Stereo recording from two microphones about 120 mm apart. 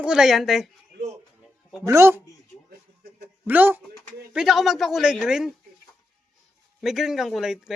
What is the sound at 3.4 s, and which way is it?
Speech, 15° right (ahead or behind).